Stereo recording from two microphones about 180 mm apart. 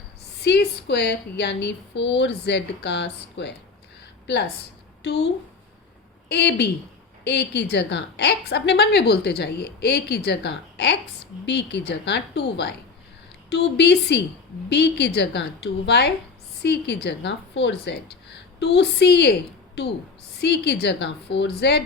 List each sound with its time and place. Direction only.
0.4 s a woman's voice: 70° left (ahead or behind)